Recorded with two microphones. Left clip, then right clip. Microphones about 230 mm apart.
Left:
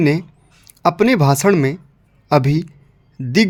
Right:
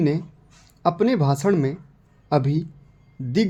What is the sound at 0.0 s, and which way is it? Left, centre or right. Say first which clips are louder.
Speech: left 6 dB; left.